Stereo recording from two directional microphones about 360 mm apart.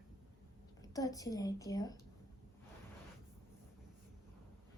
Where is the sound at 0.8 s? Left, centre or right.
Centre.